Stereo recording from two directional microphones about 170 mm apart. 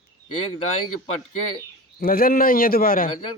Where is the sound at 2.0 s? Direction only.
60° left (ahead or behind).